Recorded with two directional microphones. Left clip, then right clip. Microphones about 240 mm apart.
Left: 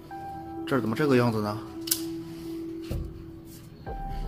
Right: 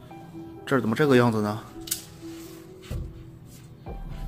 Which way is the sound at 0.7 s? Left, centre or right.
Centre.